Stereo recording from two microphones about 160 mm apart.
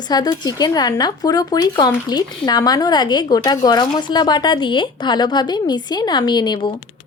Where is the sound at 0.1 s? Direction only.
25° left (ahead or behind).